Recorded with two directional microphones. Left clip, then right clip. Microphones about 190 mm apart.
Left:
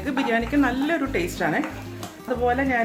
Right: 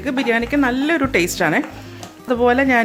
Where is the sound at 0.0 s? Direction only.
40° right (ahead or behind).